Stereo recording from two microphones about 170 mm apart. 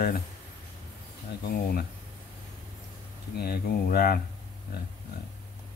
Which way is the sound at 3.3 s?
65° left (ahead or behind).